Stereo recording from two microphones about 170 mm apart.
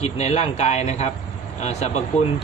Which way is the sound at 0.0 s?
40° left (ahead or behind).